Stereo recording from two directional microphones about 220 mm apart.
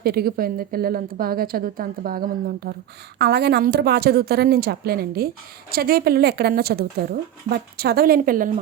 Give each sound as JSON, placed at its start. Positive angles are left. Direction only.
{"t": 0.0, "sound": "a woman's voice", "side_deg": -45}